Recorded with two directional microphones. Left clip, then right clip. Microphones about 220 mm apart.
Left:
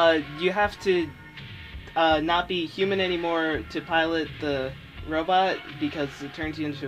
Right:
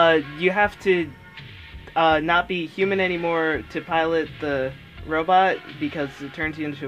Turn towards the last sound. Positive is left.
turn(degrees=-25)  # may be behind; listen again after turning